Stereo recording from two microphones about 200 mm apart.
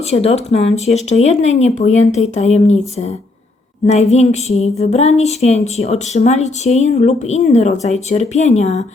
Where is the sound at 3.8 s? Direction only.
35° left (ahead or behind).